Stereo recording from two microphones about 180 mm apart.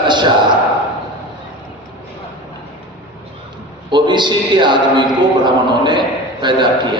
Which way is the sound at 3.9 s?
25° right (ahead or behind).